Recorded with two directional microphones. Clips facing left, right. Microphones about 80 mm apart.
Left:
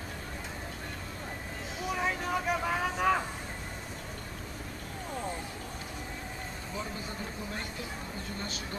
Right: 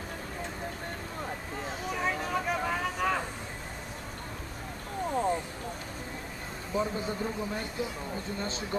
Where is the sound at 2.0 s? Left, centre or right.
Centre.